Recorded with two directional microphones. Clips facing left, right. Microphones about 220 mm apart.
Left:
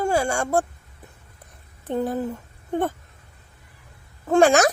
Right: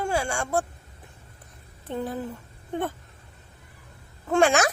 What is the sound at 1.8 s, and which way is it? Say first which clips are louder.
Speech: left 6 dB; 45° left (ahead or behind).